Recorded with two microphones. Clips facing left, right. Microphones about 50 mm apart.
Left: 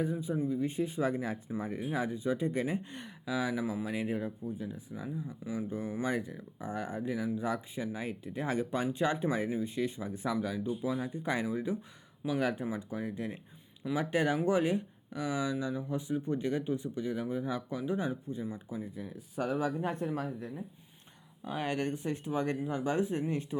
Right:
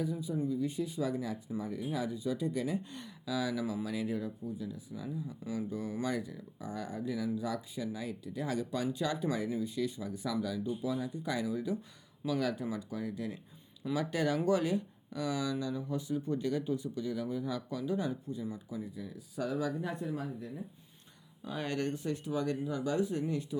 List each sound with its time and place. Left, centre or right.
0.0 s speech: left
18.9 s speech: left
21.4 s speech: left